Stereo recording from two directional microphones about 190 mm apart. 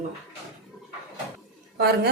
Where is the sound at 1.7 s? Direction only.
60° right (ahead or behind).